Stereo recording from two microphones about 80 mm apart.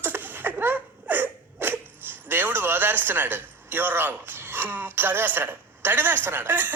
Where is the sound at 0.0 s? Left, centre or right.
Right.